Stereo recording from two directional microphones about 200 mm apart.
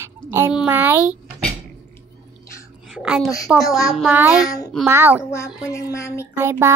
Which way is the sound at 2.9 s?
Centre (ahead or behind).